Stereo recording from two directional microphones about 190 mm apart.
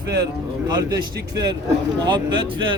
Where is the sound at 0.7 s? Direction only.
20° right (ahead or behind).